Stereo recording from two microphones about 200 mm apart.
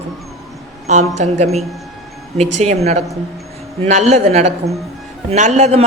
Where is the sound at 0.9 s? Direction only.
35° right (ahead or behind).